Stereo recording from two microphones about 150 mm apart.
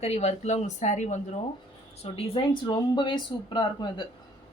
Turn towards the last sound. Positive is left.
turn(degrees=30)  # may be behind; listen again after turning